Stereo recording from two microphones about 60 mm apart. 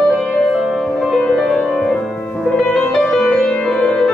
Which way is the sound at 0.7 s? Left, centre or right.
Centre.